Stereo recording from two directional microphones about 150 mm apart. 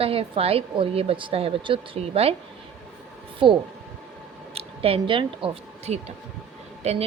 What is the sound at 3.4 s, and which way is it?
A woman's voice, 35° right (ahead or behind).